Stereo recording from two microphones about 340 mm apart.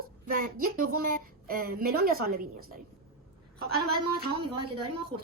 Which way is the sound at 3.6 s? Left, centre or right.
Right.